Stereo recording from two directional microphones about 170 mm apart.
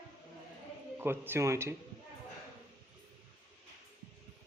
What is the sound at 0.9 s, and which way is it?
Speech, 10° right (ahead or behind).